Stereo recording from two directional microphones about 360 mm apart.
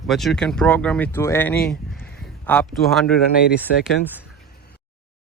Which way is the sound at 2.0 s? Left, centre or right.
Left.